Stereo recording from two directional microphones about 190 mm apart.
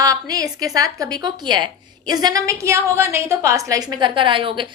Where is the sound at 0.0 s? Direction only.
20° right (ahead or behind).